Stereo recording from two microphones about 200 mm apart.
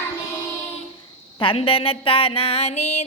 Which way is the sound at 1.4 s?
25° left (ahead or behind).